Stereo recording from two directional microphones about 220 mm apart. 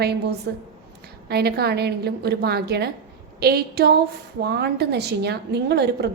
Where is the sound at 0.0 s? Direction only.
45° right (ahead or behind).